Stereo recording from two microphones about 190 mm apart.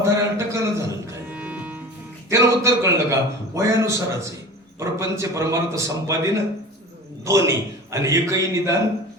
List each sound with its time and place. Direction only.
0.0 s music: 15° right (ahead or behind)
2.3 s a man's voice: 15° right (ahead or behind)